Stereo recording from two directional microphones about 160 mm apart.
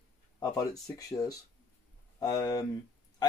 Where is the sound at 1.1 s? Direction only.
25° left (ahead or behind).